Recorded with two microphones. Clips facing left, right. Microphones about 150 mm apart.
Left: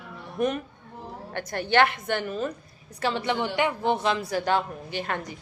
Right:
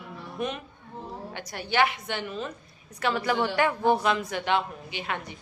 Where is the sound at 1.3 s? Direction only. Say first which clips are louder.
Left 5 dB; 50° left (ahead or behind).